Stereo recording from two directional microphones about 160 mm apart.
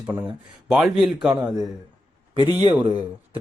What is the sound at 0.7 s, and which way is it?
Speech, 5° right (ahead or behind).